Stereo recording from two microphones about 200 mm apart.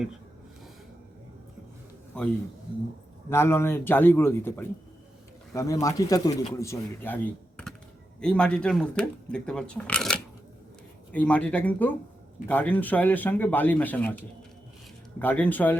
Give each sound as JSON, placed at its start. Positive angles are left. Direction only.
{"t": 3.2, "sound": "speech", "side_deg": 10}
{"t": 15.2, "sound": "speech", "side_deg": 10}